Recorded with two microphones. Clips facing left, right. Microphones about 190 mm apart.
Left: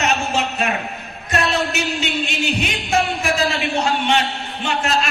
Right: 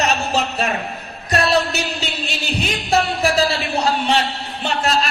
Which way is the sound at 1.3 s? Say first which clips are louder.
Right 3 dB; 35° right (ahead or behind).